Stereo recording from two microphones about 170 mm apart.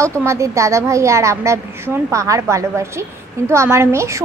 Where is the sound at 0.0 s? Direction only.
15° right (ahead or behind).